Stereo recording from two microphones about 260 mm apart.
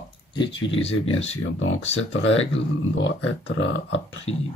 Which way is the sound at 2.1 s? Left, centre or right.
Left.